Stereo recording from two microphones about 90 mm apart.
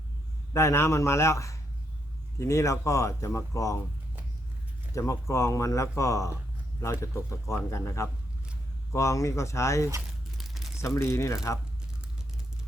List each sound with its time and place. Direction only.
0.5 s speech: 30° left (ahead or behind)
4.9 s speech: 35° left (ahead or behind)
10.3 s crumpling: centre (ahead or behind)
10.8 s speech: 35° left (ahead or behind)